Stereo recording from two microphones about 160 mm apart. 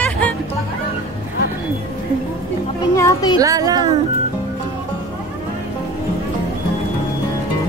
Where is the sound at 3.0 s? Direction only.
20° left (ahead or behind).